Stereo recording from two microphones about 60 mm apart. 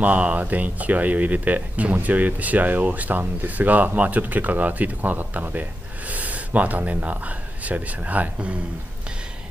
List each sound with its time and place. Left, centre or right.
0.0 s speech: right